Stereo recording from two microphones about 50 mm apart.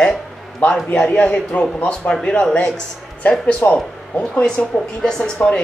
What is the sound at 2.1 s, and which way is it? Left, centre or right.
Speech, centre.